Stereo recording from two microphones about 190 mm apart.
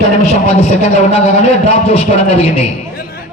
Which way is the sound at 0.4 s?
35° left (ahead or behind).